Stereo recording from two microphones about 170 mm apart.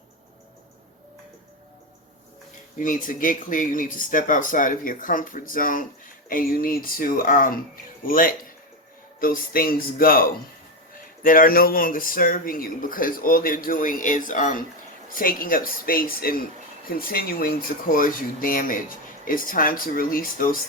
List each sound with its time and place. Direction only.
2.7 s speech: 50° left (ahead or behind)